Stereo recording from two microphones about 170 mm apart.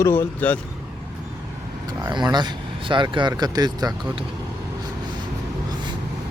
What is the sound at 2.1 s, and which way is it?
Speech, 25° right (ahead or behind).